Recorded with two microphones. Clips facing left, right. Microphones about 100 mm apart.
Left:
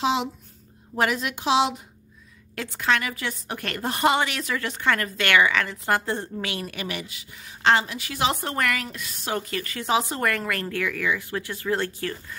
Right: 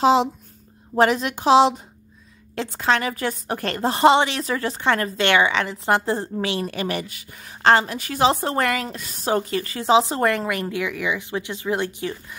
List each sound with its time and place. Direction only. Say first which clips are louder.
0.0 s a woman's voice: right 7 dB; 40° right (ahead or behind); by 12.4 s 15° right (ahead or behind)